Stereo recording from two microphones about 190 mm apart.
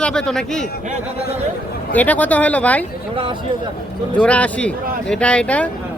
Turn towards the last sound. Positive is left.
turn(degrees=5)  # may be behind; listen again after turning